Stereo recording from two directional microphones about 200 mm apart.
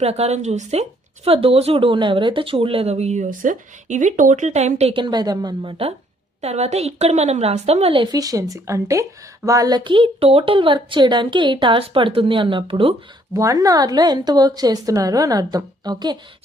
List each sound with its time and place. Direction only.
0.0 s a woman's voice: 30° right (ahead or behind)